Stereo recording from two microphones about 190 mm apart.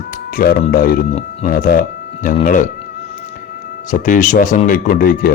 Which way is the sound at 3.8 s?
45° left (ahead or behind).